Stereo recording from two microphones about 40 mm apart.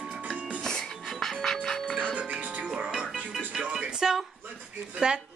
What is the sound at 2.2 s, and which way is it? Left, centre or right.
Music, right.